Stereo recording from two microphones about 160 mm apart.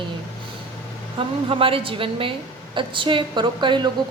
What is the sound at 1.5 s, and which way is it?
A woman's voice, 35° right (ahead or behind).